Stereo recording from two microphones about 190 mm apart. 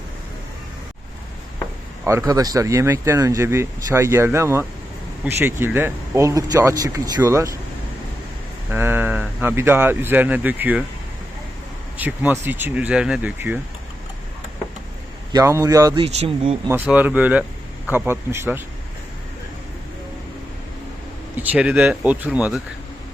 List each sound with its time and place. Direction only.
2.0 s speech: 15° right (ahead or behind)
8.7 s speech: 10° right (ahead or behind)
11.9 s speech: 10° right (ahead or behind)
15.3 s speech: 15° right (ahead or behind)
16.0 s speech: 30° right (ahead or behind)
16.6 s speech: 10° right (ahead or behind)
21.3 s speech: 5° right (ahead or behind)